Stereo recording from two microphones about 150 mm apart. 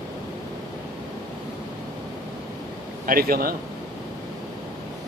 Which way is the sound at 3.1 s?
75° right (ahead or behind).